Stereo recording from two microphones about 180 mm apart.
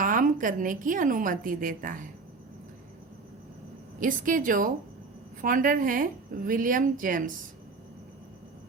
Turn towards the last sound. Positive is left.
turn(degrees=-50)  # may be behind; listen again after turning